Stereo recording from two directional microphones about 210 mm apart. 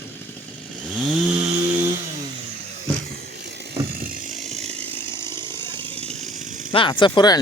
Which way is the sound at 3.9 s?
45° right (ahead or behind).